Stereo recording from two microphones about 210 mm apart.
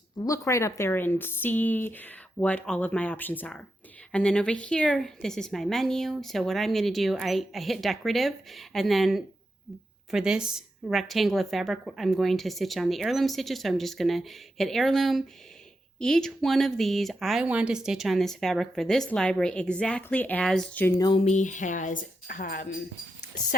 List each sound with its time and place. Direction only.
0.3 s a woman's voice: 15° left (ahead or behind)
21.2 s speech: 35° left (ahead or behind)